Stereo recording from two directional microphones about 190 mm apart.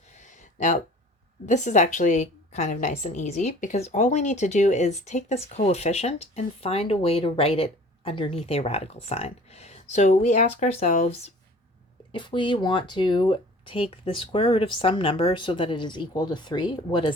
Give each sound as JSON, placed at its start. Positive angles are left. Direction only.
{"t": 0.1, "sound": "a sound", "side_deg": 40}
{"t": 1.5, "sound": "a woman's voice", "side_deg": 40}
{"t": 12.1, "sound": "speech", "side_deg": 25}